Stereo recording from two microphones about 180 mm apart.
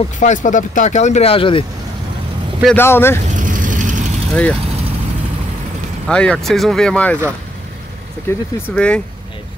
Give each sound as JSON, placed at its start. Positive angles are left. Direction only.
{"t": 0.2, "sound": "speech", "side_deg": 45}
{"t": 2.6, "sound": "speech", "side_deg": 10}
{"t": 3.3, "sound": "vehicle", "side_deg": -45}
{"t": 4.3, "sound": "speech", "side_deg": 5}
{"t": 6.0, "sound": "speech", "side_deg": 5}
{"t": 8.3, "sound": "speech", "side_deg": 10}